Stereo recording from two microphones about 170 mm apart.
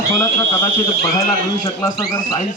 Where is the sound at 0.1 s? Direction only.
20° left (ahead or behind).